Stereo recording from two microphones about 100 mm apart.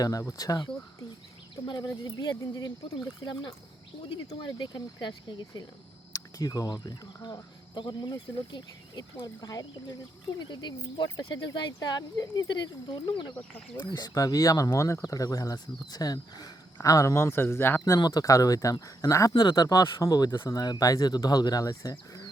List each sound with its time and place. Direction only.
0.0 s speech: 35° left (ahead or behind)
4.1 s speech: 55° left (ahead or behind)
6.1 s speech: 40° left (ahead or behind)
14.1 s speech: 35° left (ahead or behind)
18.0 s speech: 40° left (ahead or behind)
19.3 s speech: 55° left (ahead or behind)
19.6 s speech: 35° left (ahead or behind)